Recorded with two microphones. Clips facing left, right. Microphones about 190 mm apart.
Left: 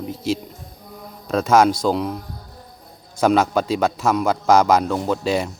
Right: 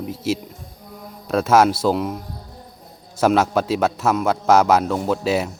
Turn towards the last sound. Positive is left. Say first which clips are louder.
# right 1 dB
turn(degrees=-5)  # may be behind; listen again after turning